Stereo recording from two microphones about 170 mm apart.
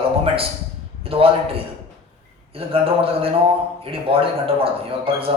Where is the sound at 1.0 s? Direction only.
35° right (ahead or behind).